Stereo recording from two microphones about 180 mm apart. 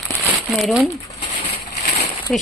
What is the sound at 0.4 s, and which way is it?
Speech, centre (ahead or behind).